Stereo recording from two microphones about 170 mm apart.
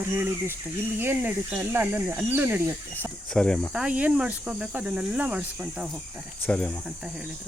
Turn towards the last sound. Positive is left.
turn(degrees=5)  # may be behind; listen again after turning